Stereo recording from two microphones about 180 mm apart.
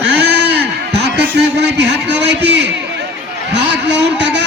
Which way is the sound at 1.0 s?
70° right (ahead or behind).